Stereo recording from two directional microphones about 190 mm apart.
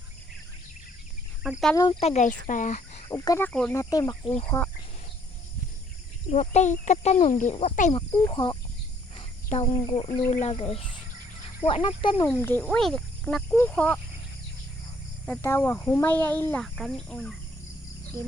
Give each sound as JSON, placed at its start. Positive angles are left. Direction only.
{"t": 1.7, "sound": "speech", "side_deg": 20}
{"t": 2.0, "sound": "speech", "side_deg": 35}
{"t": 3.1, "sound": "speech", "side_deg": 15}
{"t": 3.8, "sound": "speech", "side_deg": 20}
{"t": 6.3, "sound": "speech", "side_deg": 35}
{"t": 8.1, "sound": "speech", "side_deg": 20}
{"t": 9.5, "sound": "speech", "side_deg": 40}
{"t": 9.8, "sound": "speech", "side_deg": 25}
{"t": 12.3, "sound": "speech", "side_deg": 10}
{"t": 15.3, "sound": "speech", "side_deg": 15}
{"t": 16.6, "sound": "speech", "side_deg": 0}